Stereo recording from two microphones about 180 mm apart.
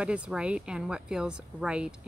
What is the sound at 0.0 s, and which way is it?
A woman's voice, 5° right (ahead or behind).